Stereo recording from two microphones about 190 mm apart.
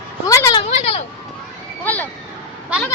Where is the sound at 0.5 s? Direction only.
30° left (ahead or behind).